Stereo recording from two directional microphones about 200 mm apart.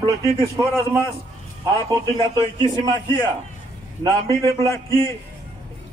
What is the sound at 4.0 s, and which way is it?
Speech, 20° right (ahead or behind).